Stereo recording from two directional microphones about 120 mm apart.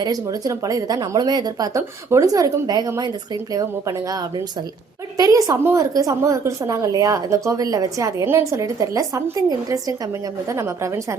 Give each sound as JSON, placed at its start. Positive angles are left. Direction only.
{"t": 0.0, "sound": "a woman's voice", "side_deg": -30}